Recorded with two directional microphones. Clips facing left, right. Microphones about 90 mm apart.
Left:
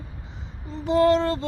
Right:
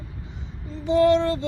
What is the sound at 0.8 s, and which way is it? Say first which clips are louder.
Child singing: right 1 dB; 40° left (ahead or behind).